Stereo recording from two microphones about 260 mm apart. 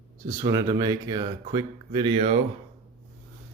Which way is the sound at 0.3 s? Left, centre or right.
Centre.